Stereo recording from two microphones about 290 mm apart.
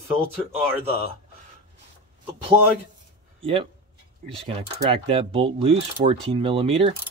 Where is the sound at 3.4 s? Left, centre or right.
Centre.